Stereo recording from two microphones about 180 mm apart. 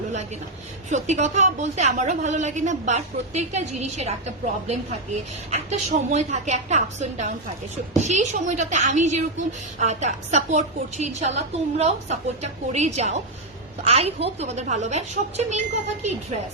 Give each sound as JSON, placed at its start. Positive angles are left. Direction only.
{"t": 0.9, "sound": "a woman's voice", "side_deg": -40}